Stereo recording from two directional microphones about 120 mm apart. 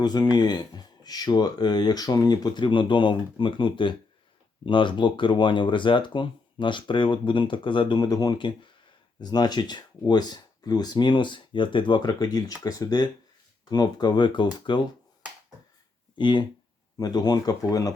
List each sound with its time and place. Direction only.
0.0 s speech: 35° left (ahead or behind)
16.1 s speech: 40° left (ahead or behind)